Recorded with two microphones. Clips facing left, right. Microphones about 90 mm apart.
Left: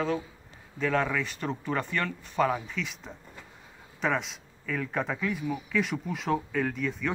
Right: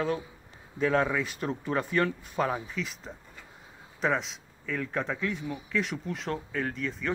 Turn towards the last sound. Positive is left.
turn(degrees=0)  # may be behind; listen again after turning